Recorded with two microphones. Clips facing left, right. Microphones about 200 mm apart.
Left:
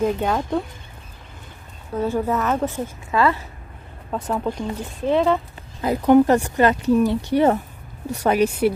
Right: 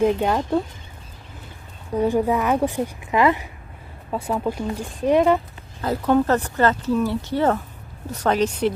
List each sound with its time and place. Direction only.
0.0 s a woman's voice: 5° right (ahead or behind)
2.0 s a woman's voice: 15° right (ahead or behind)
4.1 s a woman's voice: 5° right (ahead or behind)
5.8 s speech: 15° left (ahead or behind)